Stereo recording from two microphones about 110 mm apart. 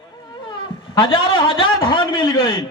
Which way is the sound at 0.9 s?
50° left (ahead or behind).